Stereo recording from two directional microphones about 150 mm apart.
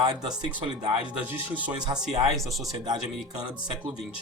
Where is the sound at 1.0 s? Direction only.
10° right (ahead or behind).